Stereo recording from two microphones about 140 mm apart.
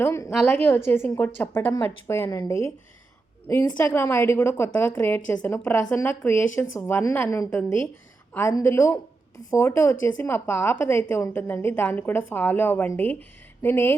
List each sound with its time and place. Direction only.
0.0 s a woman's voice: 20° left (ahead or behind)